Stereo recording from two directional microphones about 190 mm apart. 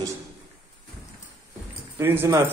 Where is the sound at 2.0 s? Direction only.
10° right (ahead or behind).